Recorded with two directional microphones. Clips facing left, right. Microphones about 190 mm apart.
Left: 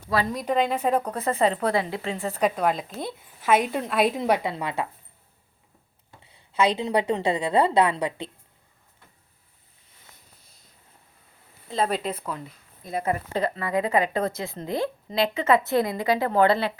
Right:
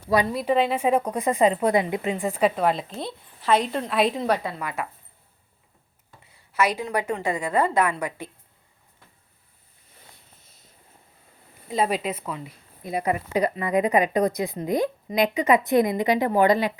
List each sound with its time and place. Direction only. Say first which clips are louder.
0.3 s speech: right 2 dB; 5° right (ahead or behind)
4.2 s a woman's voice: left 1 dB; 15° left (ahead or behind)
6.2 s a woman's voice: left 1 dB; 25° left (ahead or behind)
11.7 s speech: right 1 dB; 10° right (ahead or behind)